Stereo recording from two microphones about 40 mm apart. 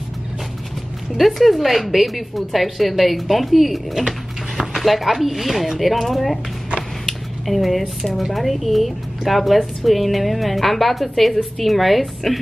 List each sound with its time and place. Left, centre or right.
1.1 s speech: centre
7.1 s a sound: centre
8.2 s speech: centre